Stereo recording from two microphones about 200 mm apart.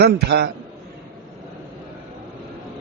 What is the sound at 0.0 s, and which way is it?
Speech, 55° right (ahead or behind).